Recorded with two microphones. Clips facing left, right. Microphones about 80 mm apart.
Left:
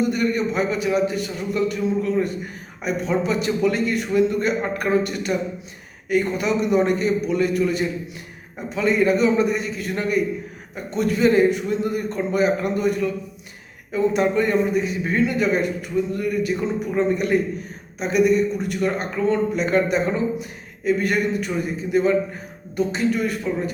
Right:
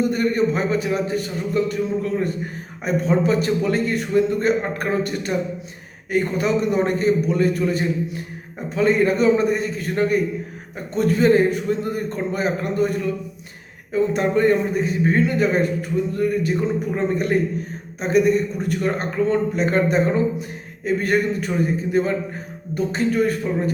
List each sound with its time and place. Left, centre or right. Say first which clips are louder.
0.1 s a man's voice: right 2 dB; right